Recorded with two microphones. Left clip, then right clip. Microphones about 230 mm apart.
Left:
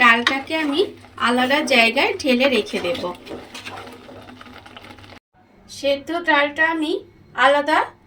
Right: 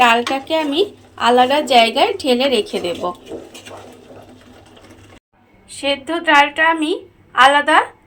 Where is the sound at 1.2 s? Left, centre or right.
Centre.